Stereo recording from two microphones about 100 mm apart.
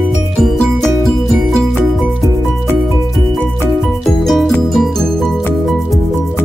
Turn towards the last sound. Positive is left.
turn(degrees=5)  # may be behind; listen again after turning